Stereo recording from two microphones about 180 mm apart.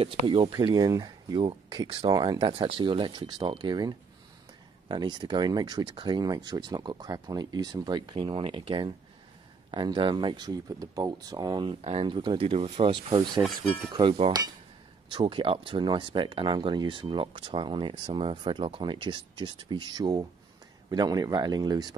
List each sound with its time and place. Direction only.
0.0 s speech: 30° right (ahead or behind)